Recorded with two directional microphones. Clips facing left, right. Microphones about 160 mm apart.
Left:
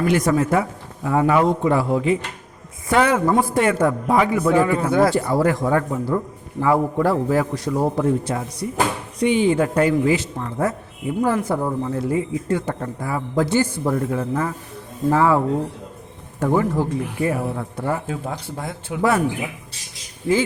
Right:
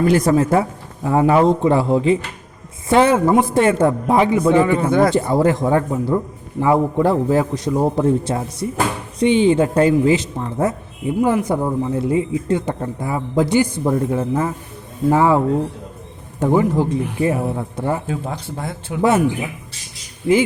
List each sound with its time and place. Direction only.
0.0 s a man's voice: 30° right (ahead or behind)
4.5 s speech: centre (ahead or behind)
5.1 s a man's voice: 25° right (ahead or behind)
18.9 s speech: 5° left (ahead or behind)